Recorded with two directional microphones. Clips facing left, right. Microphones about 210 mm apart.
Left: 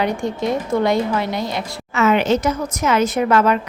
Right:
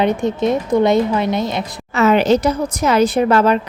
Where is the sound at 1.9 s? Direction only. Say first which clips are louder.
Right 3 dB; 35° right (ahead or behind).